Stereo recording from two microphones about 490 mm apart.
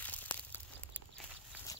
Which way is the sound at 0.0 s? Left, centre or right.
Centre.